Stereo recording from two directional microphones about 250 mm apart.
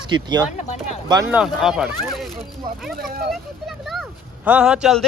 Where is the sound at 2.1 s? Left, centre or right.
Centre.